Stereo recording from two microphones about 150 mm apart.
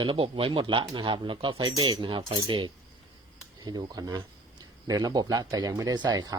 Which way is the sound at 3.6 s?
25° right (ahead or behind).